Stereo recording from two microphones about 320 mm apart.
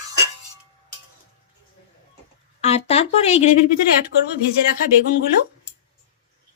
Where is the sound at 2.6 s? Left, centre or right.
Centre.